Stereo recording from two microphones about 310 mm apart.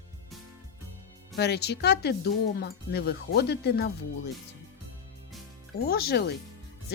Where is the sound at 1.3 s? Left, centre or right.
Left.